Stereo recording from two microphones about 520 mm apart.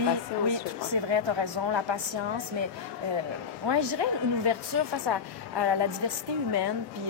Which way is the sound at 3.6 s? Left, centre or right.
Right.